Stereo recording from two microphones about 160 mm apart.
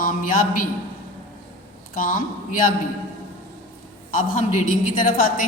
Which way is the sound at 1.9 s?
60° left (ahead or behind).